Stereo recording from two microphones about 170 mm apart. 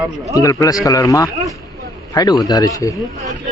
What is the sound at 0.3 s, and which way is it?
A man's voice, 20° left (ahead or behind).